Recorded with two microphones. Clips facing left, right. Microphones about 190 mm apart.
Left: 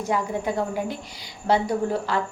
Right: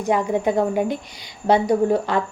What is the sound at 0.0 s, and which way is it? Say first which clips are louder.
A woman's voice: right 6 dB; 20° right (ahead or behind).